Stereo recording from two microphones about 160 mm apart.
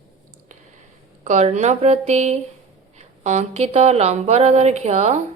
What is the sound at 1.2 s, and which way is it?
Speech, 45° right (ahead or behind).